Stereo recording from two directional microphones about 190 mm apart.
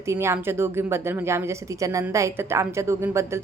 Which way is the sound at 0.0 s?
15° right (ahead or behind).